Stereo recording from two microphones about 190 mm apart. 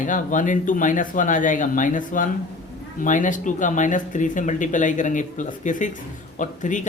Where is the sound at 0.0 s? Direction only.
45° left (ahead or behind).